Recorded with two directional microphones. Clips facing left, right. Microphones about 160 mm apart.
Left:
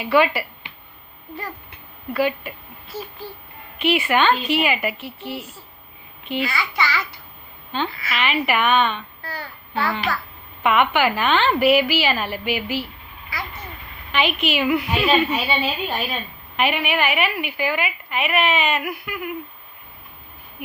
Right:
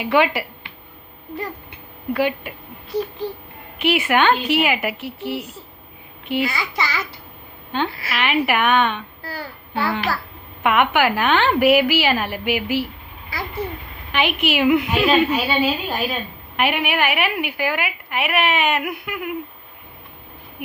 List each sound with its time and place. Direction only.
0.0 s a woman's voice: 15° right (ahead or behind)
2.1 s a woman's voice: 15° right (ahead or behind)
3.8 s a woman's voice: 15° right (ahead or behind)
13.3 s vehicle: 30° right (ahead or behind)
14.1 s a woman's voice: 15° right (ahead or behind)
14.9 s a woman's voice: centre (ahead or behind)
16.6 s a woman's voice: 15° right (ahead or behind)